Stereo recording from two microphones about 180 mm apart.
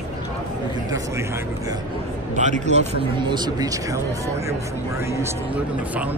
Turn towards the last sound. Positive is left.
turn(degrees=-10)  # may be behind; listen again after turning